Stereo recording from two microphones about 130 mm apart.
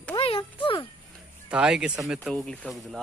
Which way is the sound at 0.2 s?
45° left (ahead or behind).